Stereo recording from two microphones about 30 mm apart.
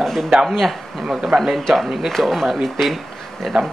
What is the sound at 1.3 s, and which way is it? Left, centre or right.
Speech, right.